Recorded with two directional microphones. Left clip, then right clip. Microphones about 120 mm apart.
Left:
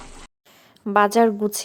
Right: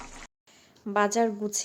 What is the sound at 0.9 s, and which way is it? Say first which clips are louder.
Speech: left 8 dB; 45° left (ahead or behind).